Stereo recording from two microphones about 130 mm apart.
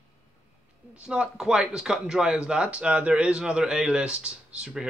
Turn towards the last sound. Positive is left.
turn(degrees=-5)  # may be behind; listen again after turning